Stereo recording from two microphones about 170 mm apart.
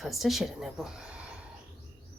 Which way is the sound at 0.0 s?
Centre (ahead or behind).